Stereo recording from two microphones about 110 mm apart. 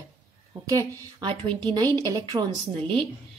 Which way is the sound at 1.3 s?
45° right (ahead or behind).